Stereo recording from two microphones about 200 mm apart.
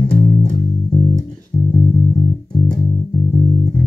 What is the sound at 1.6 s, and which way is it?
Music, 35° left (ahead or behind).